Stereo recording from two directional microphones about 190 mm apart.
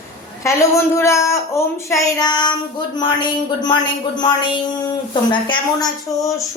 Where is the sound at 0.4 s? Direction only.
15° left (ahead or behind).